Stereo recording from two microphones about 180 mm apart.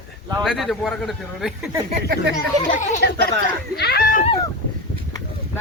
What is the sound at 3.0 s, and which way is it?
Speech, 65° left (ahead or behind).